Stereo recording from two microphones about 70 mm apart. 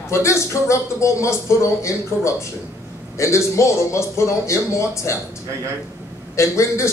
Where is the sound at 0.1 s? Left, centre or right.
Left.